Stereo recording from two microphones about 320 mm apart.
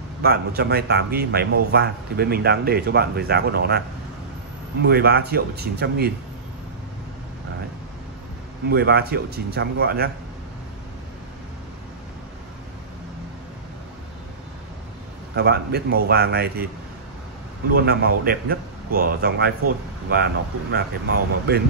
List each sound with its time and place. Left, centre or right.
0.2 s speech: right
4.8 s speech: right
8.6 s speech: right
15.3 s speech: right
17.7 s speech: right